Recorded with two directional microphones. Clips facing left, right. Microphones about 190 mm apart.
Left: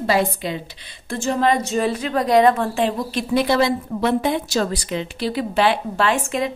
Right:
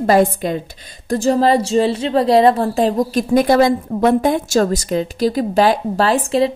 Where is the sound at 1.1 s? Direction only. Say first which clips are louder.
Right 5 dB; 35° right (ahead or behind).